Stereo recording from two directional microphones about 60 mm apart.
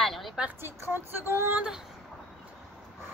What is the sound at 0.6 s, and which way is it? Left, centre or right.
Speech, right.